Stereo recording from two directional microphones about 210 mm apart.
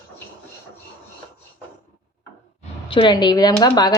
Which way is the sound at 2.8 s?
25° left (ahead or behind).